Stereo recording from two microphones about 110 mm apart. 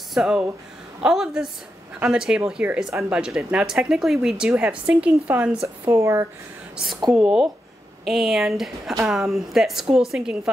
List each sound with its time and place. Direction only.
0.1 s a woman's voice: 5° right (ahead or behind)
5.9 s speech: 25° right (ahead or behind)
7.2 s a woman's voice: 5° right (ahead or behind)